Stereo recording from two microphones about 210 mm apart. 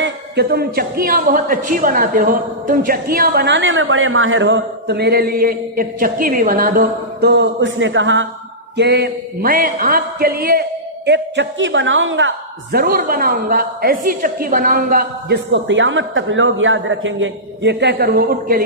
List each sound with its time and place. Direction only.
0.0 s a man's voice: 50° right (ahead or behind)
11.1 s a woman's voice: 60° right (ahead or behind)